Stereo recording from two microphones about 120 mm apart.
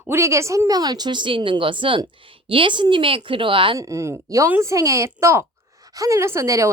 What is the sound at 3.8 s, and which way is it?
Speech, 25° right (ahead or behind).